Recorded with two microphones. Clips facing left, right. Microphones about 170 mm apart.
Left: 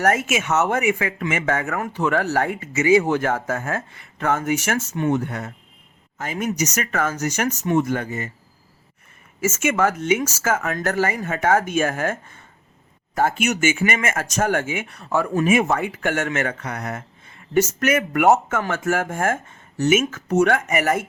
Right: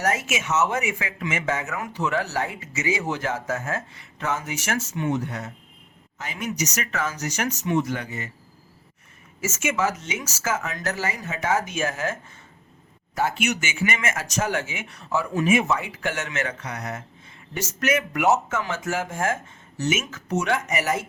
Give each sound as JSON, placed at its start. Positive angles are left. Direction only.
{"t": 0.0, "sound": "speech", "side_deg": 55}
{"t": 9.4, "sound": "speech", "side_deg": 55}